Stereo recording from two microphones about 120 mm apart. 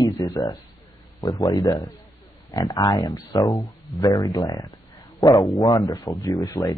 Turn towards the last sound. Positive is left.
turn(degrees=30)  # may be behind; listen again after turning